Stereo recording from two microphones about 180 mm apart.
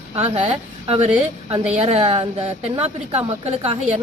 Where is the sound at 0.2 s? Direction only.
35° right (ahead or behind).